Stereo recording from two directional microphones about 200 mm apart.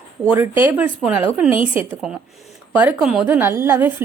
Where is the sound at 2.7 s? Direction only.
5° right (ahead or behind).